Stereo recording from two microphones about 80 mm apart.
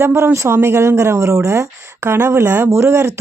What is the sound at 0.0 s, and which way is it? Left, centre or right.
Speech, right.